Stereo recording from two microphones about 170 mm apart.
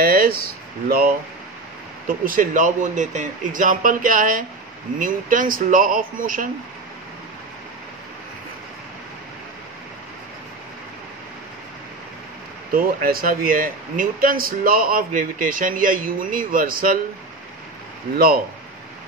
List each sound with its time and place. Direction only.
0.0 s a sound: 60° right (ahead or behind)
0.8 s speech: 60° right (ahead or behind)
12.7 s speech: 60° right (ahead or behind)
18.1 s speech: 60° right (ahead or behind)